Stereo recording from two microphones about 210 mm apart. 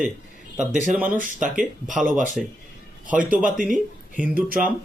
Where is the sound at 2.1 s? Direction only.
40° right (ahead or behind).